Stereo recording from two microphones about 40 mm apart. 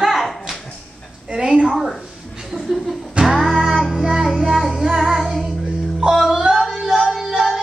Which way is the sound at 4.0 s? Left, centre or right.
Centre.